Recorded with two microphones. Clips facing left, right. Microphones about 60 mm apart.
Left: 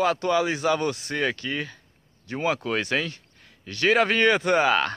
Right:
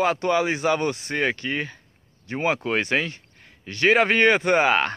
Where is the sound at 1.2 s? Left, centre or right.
Centre.